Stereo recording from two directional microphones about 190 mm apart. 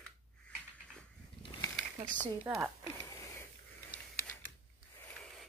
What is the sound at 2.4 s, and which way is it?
Speech, 15° right (ahead or behind).